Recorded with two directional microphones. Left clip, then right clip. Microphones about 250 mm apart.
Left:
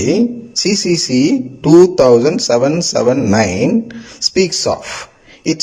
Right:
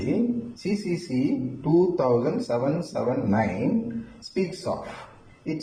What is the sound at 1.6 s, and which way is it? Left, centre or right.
A man's voice, left.